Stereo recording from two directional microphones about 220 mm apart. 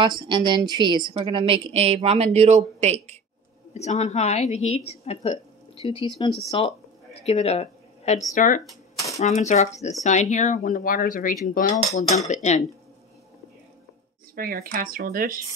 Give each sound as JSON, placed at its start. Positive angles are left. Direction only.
{"t": 0.0, "sound": "speech", "side_deg": -20}
{"t": 3.7, "sound": "a woman's voice", "side_deg": 30}
{"t": 8.9, "sound": "typewriter", "side_deg": 15}
{"t": 9.2, "sound": "speech", "side_deg": 30}
{"t": 14.3, "sound": "speech", "side_deg": -40}